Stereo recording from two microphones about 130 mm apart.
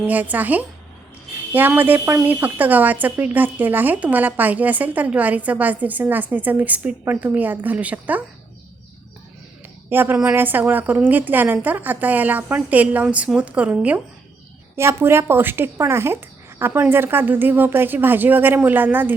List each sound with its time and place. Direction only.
0.0 s speech: 15° right (ahead or behind)
9.9 s a woman's voice: 15° right (ahead or behind)